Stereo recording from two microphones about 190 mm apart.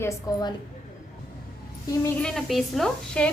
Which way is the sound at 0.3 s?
20° left (ahead or behind).